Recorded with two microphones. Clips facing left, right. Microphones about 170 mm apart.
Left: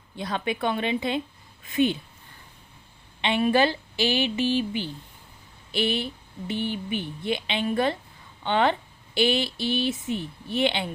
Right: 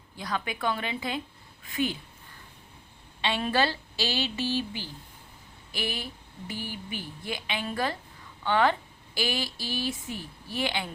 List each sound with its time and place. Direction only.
0.2 s a woman's voice: 25° left (ahead or behind)
3.2 s a woman's voice: 15° left (ahead or behind)